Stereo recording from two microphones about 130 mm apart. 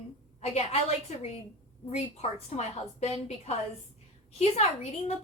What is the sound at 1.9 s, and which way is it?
A woman's voice, 55° left (ahead or behind).